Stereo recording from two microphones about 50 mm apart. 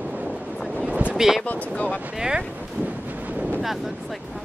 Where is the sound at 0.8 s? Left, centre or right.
Right.